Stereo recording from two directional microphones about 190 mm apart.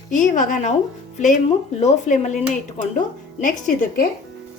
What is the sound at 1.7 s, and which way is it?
Speech, 35° left (ahead or behind).